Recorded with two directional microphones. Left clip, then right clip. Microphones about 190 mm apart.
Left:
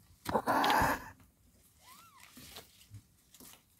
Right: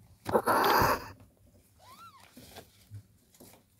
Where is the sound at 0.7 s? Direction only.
20° right (ahead or behind).